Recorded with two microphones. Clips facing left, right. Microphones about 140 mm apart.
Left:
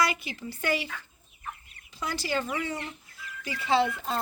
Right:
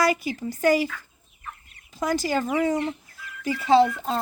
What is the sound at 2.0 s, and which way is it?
Speech, 40° right (ahead or behind).